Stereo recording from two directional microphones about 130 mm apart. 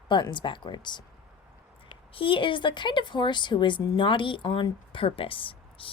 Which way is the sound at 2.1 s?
40° left (ahead or behind).